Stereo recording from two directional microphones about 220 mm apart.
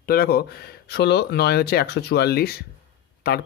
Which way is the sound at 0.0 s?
45° left (ahead or behind).